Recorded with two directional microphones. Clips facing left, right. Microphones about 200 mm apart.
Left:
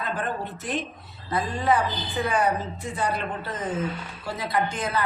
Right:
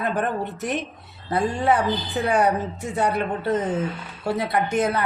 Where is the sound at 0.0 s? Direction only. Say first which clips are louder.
Right 5 dB; 65° right (ahead or behind).